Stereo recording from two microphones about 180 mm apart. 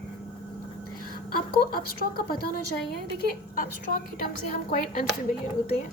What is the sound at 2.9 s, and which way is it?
A woman's voice, 55° left (ahead or behind).